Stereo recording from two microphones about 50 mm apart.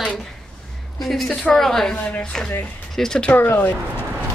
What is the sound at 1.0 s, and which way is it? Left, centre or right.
A woman's voice, centre.